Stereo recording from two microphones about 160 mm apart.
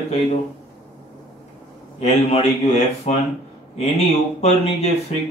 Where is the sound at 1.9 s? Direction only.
40° left (ahead or behind).